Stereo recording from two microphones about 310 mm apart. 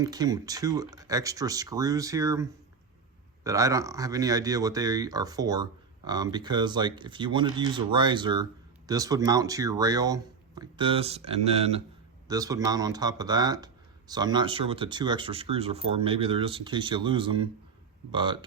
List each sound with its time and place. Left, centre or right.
0.0 s speech: centre